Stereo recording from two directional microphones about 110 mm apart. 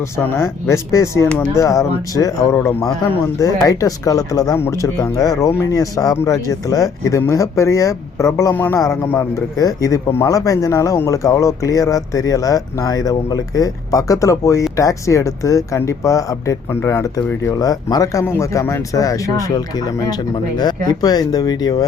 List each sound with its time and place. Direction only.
0.2 s speech: 20° left (ahead or behind)
8.5 s speech: 15° left (ahead or behind)
8.8 s speech: 30° left (ahead or behind)